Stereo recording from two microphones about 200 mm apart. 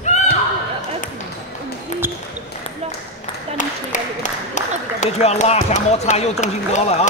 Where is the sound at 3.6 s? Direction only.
40° left (ahead or behind).